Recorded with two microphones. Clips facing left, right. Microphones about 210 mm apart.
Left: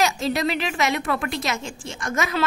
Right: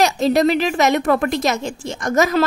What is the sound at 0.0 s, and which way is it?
A woman's voice, 40° right (ahead or behind).